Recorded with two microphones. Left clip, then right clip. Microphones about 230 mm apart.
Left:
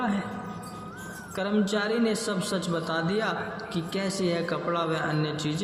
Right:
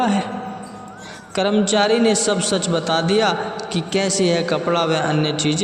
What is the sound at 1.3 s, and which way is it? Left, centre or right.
A man's voice, right.